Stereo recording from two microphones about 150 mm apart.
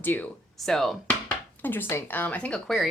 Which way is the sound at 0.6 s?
Centre (ahead or behind).